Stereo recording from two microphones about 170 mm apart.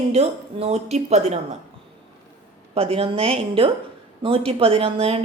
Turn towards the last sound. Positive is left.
turn(degrees=-35)  # may be behind; listen again after turning